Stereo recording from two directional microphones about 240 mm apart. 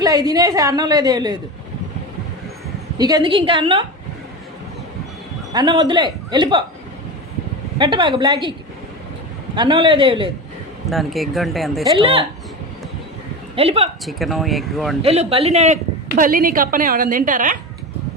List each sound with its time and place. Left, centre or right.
0.0 s a woman's voice: centre
3.0 s a man's voice: centre
5.5 s a man's voice: centre
7.8 s a man's voice: centre
9.6 s a man's voice: right
10.8 s speech: centre
11.9 s a man's voice: right
13.6 s a man's voice: right
14.0 s speech: centre
15.0 s a woman's voice: right